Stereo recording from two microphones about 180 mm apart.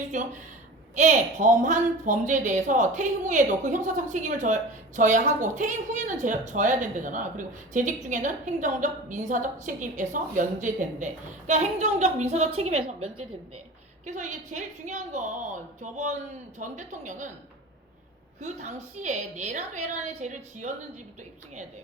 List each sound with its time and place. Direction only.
0.9 s a woman's voice: 40° right (ahead or behind)
18.3 s a woman's voice: 40° right (ahead or behind)